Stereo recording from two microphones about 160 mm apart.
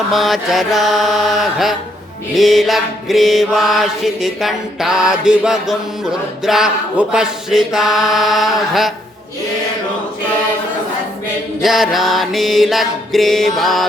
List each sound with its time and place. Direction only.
0.1 s mantra: centre (ahead or behind)
11.6 s mantra: centre (ahead or behind)